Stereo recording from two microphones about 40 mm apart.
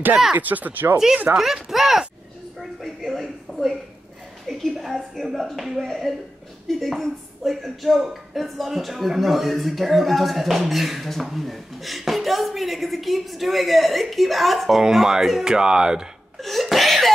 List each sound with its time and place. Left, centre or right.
0.4 s speech: right
1.4 s speech: centre
3.1 s a sound: centre
4.5 s speech: centre
6.1 s speech: centre
15.4 s speech: centre
16.3 s a sound: centre